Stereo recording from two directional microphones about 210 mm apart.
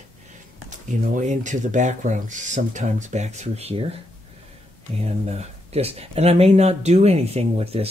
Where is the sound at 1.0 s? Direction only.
35° right (ahead or behind).